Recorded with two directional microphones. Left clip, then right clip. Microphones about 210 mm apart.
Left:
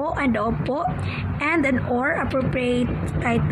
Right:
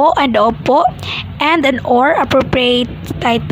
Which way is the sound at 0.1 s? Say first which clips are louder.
Right 11 dB; 55° right (ahead or behind).